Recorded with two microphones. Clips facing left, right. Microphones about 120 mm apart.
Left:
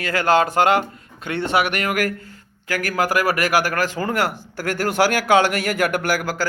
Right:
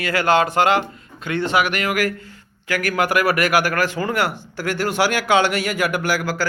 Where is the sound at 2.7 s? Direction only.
35° left (ahead or behind).